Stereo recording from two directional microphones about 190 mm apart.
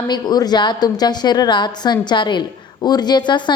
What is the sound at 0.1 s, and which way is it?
A woman's voice, 20° left (ahead or behind).